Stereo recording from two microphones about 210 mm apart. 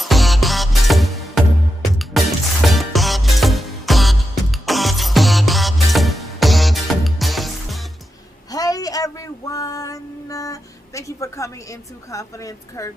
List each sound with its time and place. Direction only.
0.0 s music: centre (ahead or behind)
8.4 s female singing: 15° left (ahead or behind)